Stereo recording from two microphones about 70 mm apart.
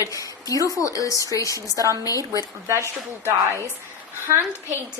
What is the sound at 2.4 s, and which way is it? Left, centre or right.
Speech, right.